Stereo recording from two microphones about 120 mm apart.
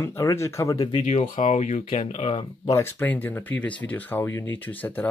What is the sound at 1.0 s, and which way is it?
Speech, 80° left.